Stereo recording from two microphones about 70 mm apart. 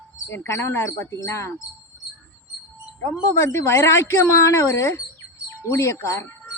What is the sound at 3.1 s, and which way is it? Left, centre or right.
Speech, left.